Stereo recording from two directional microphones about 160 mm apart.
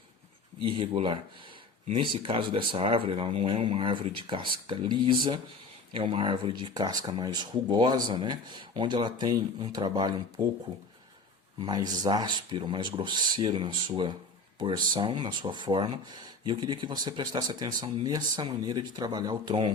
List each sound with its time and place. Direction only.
0.6 s speech: 35° right (ahead or behind)
11.6 s speech: 25° right (ahead or behind)